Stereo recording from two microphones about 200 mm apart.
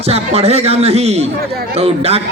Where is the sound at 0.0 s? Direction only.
30° right (ahead or behind).